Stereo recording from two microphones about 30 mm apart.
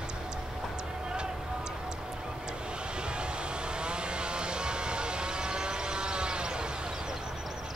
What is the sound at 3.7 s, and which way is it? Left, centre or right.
Vehicle, right.